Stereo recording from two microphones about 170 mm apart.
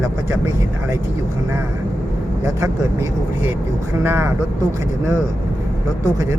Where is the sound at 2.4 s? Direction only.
15° right (ahead or behind).